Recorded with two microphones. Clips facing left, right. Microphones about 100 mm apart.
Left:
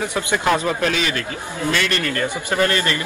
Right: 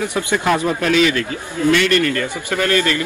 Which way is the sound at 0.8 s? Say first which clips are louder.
Right 6 dB; 40° left (ahead or behind).